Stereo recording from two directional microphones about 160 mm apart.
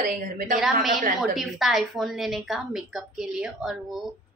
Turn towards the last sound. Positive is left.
turn(degrees=0)  # may be behind; listen again after turning